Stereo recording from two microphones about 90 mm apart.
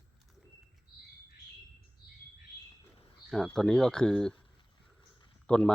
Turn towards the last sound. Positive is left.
turn(degrees=10)  # may be behind; listen again after turning